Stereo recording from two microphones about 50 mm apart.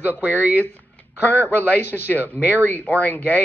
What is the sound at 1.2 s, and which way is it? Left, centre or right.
Speech, left.